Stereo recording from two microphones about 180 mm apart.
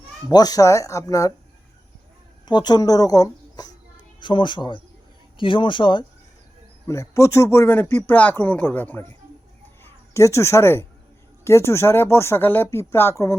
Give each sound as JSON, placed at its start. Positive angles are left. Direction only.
{"t": 0.3, "sound": "a woman's voice", "side_deg": 20}
{"t": 2.5, "sound": "a woman's voice", "side_deg": 25}
{"t": 6.8, "sound": "speech", "side_deg": 15}